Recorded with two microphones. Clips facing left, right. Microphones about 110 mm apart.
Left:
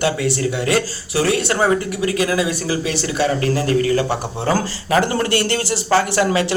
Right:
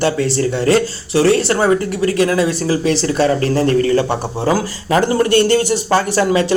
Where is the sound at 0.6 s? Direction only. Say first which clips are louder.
Right 5 dB; 30° right (ahead or behind).